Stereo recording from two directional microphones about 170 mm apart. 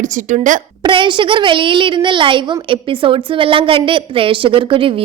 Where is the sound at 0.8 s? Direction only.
30° right (ahead or behind).